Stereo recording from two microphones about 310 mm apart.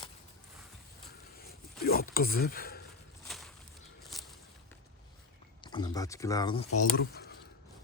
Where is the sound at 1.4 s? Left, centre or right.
Left.